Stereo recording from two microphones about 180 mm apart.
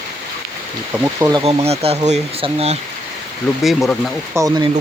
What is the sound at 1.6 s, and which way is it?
Speech, 35° right (ahead or behind).